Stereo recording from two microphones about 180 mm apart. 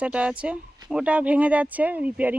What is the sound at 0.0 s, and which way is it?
Speech, 5° right (ahead or behind).